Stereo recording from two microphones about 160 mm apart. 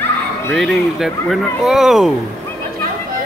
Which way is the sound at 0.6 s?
Centre (ahead or behind).